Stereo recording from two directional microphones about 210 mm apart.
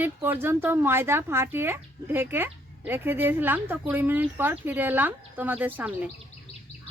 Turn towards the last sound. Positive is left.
turn(degrees=-10)  # may be behind; listen again after turning